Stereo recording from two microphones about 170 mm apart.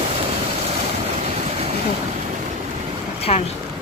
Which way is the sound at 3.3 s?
35° left (ahead or behind).